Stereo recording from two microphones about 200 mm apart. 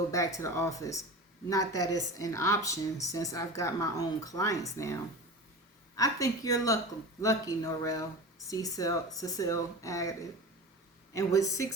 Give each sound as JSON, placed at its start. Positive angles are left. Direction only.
{"t": 0.1, "sound": "a woman's voice", "side_deg": 15}
{"t": 6.0, "sound": "a woman's voice", "side_deg": 15}